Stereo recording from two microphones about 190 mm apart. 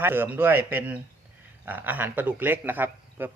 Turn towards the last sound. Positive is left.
turn(degrees=-10)  # may be behind; listen again after turning